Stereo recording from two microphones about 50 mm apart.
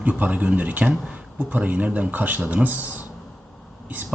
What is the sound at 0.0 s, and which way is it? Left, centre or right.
Speech, right.